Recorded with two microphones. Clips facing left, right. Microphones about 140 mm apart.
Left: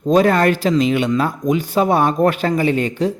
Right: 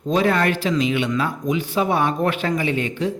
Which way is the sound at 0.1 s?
45° left (ahead or behind).